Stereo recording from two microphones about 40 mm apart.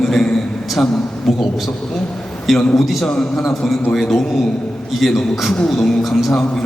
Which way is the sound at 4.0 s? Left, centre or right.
Centre.